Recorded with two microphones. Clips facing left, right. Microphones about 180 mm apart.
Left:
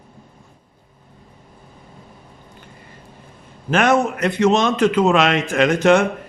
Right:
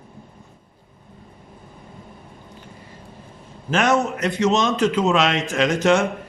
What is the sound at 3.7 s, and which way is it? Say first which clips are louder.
A man's voice: left 3 dB; 55° left (ahead or behind).